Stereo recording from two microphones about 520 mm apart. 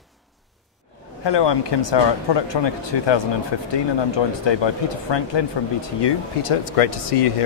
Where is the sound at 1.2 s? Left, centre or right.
Left.